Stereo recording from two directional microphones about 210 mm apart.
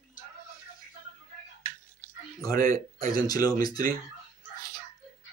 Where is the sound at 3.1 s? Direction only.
15° left (ahead or behind).